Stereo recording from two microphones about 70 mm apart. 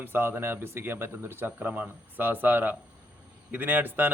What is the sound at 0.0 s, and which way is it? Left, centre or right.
A man's voice, right.